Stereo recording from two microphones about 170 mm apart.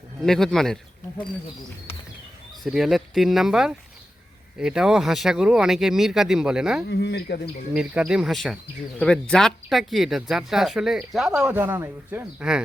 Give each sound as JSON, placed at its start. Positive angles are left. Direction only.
{"t": 0.2, "sound": "speech", "side_deg": 5}
{"t": 2.6, "sound": "speech", "side_deg": 0}
{"t": 6.8, "sound": "speech", "side_deg": 80}
{"t": 7.7, "sound": "speech", "side_deg": -5}
{"t": 11.3, "sound": "speech", "side_deg": -15}